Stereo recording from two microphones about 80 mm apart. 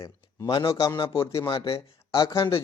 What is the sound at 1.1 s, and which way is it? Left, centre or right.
Speech, left.